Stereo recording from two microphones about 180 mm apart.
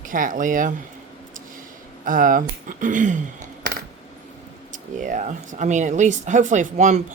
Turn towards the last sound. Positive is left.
turn(degrees=-40)  # may be behind; listen again after turning